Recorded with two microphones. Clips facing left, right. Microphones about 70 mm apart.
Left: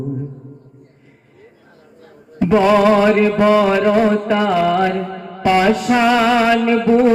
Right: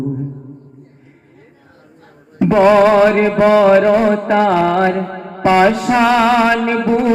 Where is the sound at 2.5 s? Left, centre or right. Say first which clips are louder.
Right 3 dB; right.